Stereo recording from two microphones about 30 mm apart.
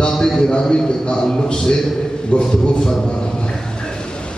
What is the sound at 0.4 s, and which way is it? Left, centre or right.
A man's voice, left.